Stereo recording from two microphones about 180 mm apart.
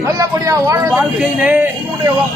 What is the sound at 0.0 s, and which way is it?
Speech, 20° right (ahead or behind).